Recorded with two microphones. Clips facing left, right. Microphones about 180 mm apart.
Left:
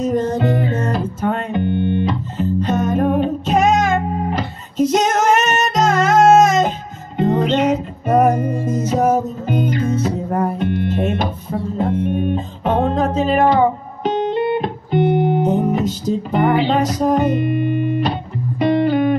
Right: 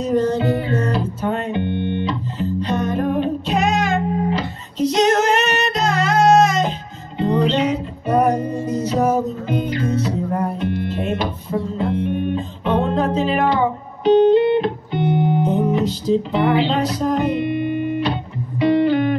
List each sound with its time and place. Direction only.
0.1 s music: 45° left (ahead or behind)